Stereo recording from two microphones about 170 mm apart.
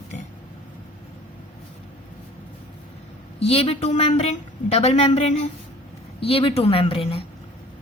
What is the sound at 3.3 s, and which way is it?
A woman's voice, 35° left (ahead or behind).